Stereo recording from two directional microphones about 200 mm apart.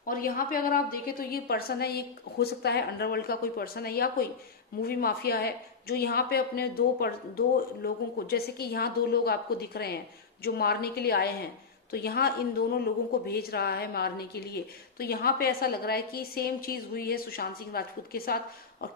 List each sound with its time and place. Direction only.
0.0 s a woman's voice: 45° left (ahead or behind)